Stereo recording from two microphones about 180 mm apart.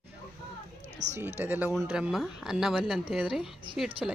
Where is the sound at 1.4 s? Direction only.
10° right (ahead or behind).